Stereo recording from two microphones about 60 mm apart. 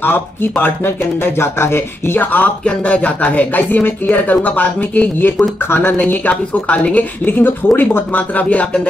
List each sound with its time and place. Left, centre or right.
0.0 s speech: left
2.3 s a woman's voice: left